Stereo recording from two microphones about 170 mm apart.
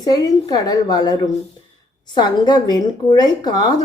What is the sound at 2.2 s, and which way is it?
Speech, 25° left (ahead or behind).